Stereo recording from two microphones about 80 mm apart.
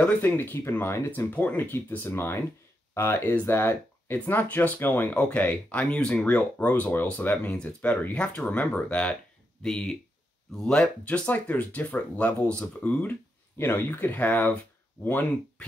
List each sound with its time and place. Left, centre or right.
0.2 s speech: left